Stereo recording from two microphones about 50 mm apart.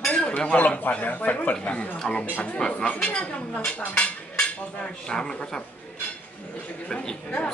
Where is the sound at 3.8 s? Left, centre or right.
Left.